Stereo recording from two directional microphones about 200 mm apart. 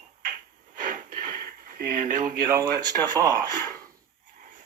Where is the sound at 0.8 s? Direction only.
40° right (ahead or behind).